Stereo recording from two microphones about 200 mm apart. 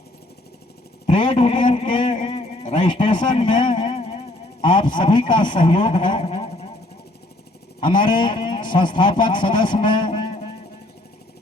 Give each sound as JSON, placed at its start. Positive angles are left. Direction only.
{"t": 1.0, "sound": "speech", "side_deg": 25}
{"t": 1.6, "sound": "a sound", "side_deg": 30}
{"t": 4.6, "sound": "speech", "side_deg": 25}
{"t": 7.8, "sound": "speech", "side_deg": 25}